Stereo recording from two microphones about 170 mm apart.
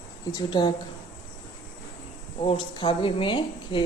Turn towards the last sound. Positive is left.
turn(degrees=30)  # may be behind; listen again after turning